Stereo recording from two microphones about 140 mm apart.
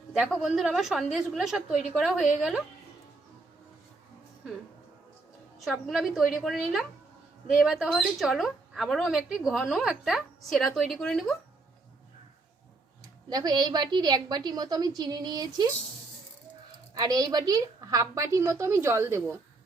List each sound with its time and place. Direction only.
0.1 s speech: 5° right (ahead or behind)
5.8 s speech: centre (ahead or behind)
13.3 s a woman's voice: 30° right (ahead or behind)
17.0 s a woman's voice: 25° right (ahead or behind)